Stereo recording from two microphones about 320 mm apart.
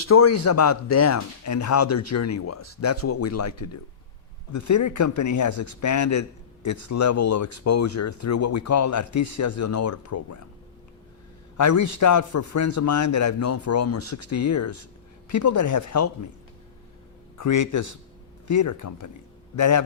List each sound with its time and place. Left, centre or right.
0.1 s speech: left
4.5 s speech: left
11.5 s speech: left
17.3 s a man's voice: left